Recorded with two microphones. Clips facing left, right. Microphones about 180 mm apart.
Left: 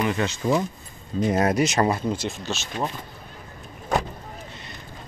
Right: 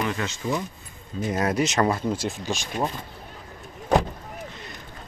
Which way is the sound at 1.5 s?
10° left (ahead or behind).